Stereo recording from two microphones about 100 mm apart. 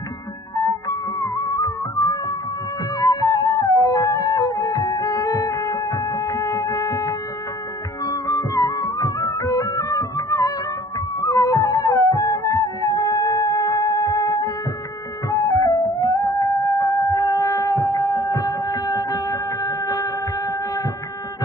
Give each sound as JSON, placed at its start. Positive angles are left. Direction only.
{"t": 0.6, "sound": "music", "side_deg": 40}